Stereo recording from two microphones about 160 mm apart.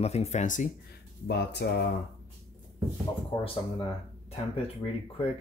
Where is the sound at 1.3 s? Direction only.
90° left.